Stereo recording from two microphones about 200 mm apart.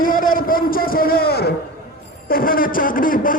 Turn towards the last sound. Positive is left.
turn(degrees=45)  # may be behind; listen again after turning